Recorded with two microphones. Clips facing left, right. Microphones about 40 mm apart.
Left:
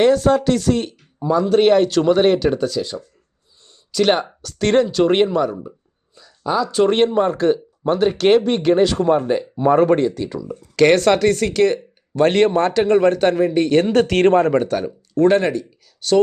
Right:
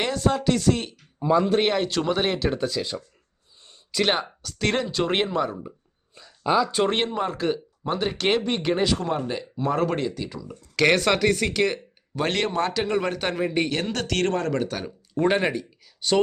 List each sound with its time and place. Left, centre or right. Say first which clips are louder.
0.0 s speech: left 9 dB; centre
1.2 s a man's voice: left 3 dB; centre
1.5 s speech: left 9 dB; centre
4.0 s speech: left 7 dB; centre
6.2 s a sound: left 1 dB; centre
6.8 s speech: left 9 dB; centre
9.0 s speech: left 10 dB; centre
10.0 s speech: left 8 dB; centre
12.3 s speech: left 6 dB; centre
13.7 s speech: left 11 dB; centre
13.9 s speech: left 11 dB; left
14.6 s speech: left 8 dB; centre
15.1 s speech: left 7 dB; centre